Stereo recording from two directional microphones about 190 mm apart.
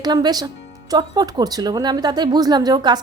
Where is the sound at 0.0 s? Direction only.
20° right (ahead or behind).